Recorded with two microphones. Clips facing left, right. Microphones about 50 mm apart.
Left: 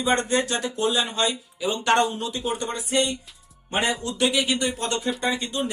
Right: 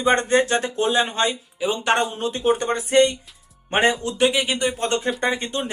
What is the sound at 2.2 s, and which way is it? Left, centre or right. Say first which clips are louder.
Speech: right 7 dB; right.